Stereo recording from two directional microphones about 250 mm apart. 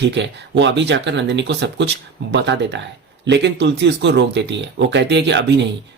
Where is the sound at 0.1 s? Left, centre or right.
Right.